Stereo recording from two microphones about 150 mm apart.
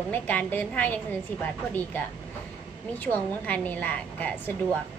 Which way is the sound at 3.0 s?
10° left (ahead or behind).